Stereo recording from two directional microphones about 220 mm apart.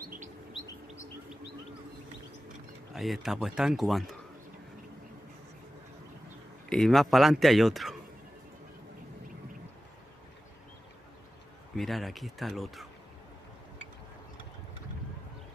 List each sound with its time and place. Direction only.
0.0 s chirp: 40° right (ahead or behind)
2.9 s speech: centre (ahead or behind)
6.7 s speech: centre (ahead or behind)
11.7 s speech: centre (ahead or behind)